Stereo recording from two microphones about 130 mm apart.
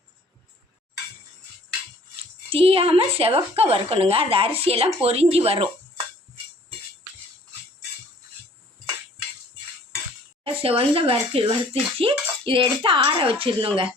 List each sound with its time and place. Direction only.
2.5 s a child's voice: 45° right (ahead or behind)
10.4 s a child's voice: 45° right (ahead or behind)